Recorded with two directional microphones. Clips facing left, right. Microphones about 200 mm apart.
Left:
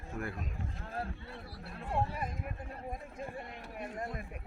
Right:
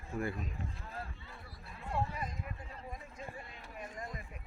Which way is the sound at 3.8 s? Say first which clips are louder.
Left 5 dB; 65° left (ahead or behind).